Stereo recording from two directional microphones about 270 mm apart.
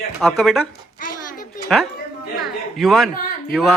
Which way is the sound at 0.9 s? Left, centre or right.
Left.